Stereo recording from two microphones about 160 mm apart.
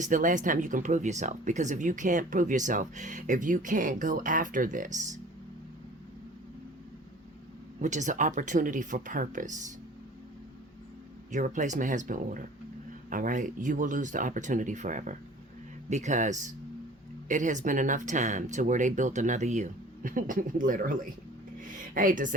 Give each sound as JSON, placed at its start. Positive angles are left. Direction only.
{"t": 0.0, "sound": "speech", "side_deg": -55}
{"t": 7.8, "sound": "speech", "side_deg": -50}
{"t": 11.3, "sound": "speech", "side_deg": -55}
{"t": 21.6, "sound": "a sound", "side_deg": -55}